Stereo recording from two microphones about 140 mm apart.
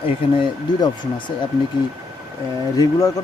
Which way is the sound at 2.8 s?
25° left (ahead or behind).